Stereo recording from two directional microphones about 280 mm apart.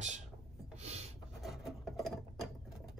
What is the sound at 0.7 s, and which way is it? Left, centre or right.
Rub, right.